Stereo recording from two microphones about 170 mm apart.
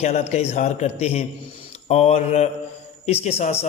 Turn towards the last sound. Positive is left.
turn(degrees=40)  # may be behind; listen again after turning